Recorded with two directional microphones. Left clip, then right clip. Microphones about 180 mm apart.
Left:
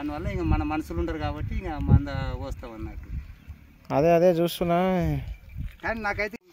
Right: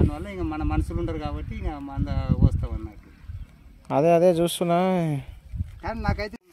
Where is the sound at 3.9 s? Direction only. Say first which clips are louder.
Right 1 dB; 15° right (ahead or behind).